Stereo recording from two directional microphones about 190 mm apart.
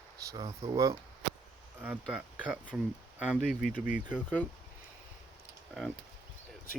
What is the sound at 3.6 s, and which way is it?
Speech, 45° left (ahead or behind).